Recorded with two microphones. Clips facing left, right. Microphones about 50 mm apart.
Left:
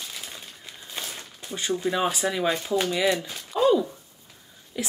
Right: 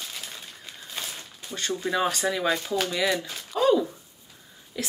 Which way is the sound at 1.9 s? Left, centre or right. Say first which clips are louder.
Right 4 dB; centre.